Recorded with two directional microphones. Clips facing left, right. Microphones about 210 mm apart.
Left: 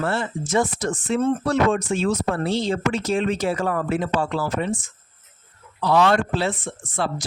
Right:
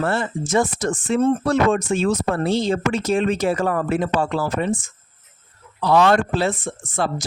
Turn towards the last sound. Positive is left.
turn(degrees=-45)  # may be behind; listen again after turning